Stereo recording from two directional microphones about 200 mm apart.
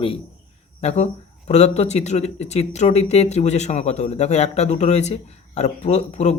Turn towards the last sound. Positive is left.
turn(degrees=35)  # may be behind; listen again after turning